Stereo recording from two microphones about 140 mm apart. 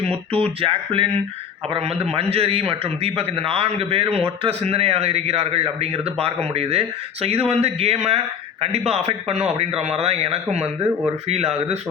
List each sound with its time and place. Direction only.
0.1 s a man's voice: 45° right (ahead or behind)